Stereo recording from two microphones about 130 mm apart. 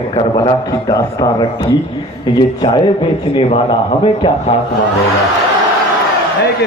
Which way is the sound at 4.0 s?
50° left (ahead or behind).